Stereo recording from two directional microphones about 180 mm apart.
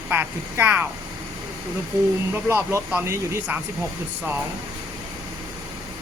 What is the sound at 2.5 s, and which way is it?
Speech, 15° right (ahead or behind).